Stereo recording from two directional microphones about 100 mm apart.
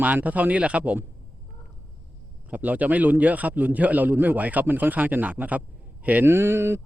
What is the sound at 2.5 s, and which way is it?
Speech, 15° right (ahead or behind).